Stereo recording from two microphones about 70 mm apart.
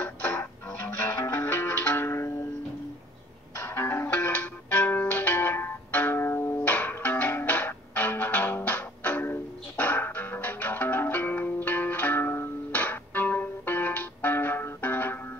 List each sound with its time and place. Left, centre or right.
0.0 s music: left
2.0 s music: left
3.6 s music: left